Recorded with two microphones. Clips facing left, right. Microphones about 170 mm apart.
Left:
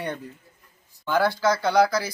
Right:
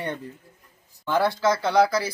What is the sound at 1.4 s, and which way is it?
Speech, centre (ahead or behind).